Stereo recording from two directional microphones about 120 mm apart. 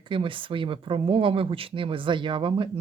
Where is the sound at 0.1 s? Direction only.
45° right (ahead or behind).